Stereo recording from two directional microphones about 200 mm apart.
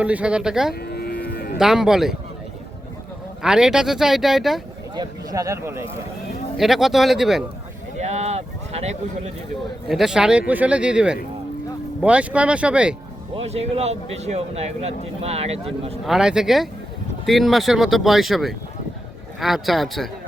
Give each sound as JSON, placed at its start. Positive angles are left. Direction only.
{"t": 0.0, "sound": "speech", "side_deg": -5}
{"t": 0.7, "sound": "livestock", "side_deg": 50}
{"t": 1.5, "sound": "speech", "side_deg": 0}
{"t": 3.4, "sound": "speech", "side_deg": -5}
{"t": 4.9, "sound": "speech", "side_deg": -15}
{"t": 6.6, "sound": "speech", "side_deg": 0}
{"t": 7.9, "sound": "a sound", "side_deg": -35}
{"t": 9.9, "sound": "speech", "side_deg": 0}
{"t": 13.3, "sound": "speech", "side_deg": -30}
{"t": 16.0, "sound": "speech", "side_deg": -5}